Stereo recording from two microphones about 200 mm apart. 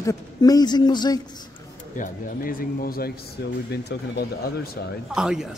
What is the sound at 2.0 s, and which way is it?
Speech, 45° left (ahead or behind).